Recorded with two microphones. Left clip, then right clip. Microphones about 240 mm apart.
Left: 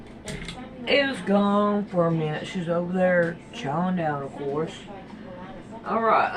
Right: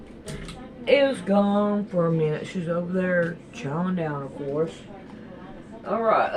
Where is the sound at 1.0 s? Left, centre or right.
Centre.